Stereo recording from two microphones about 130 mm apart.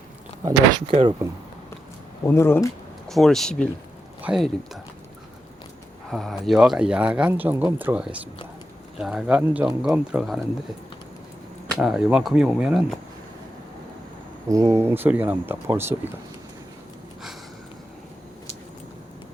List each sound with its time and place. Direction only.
0.9 s speech: 45° right (ahead or behind)
2.2 s speech: 20° left (ahead or behind)
3.1 s speech: centre (ahead or behind)
6.1 s speech: centre (ahead or behind)
11.8 s speech: 5° right (ahead or behind)
14.4 s speech: 25° right (ahead or behind)